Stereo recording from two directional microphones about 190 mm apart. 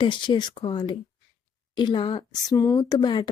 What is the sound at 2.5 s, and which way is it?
Speech, 15° left (ahead or behind).